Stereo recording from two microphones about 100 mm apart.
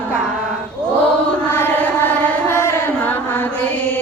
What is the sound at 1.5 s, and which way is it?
Chant, 20° left (ahead or behind).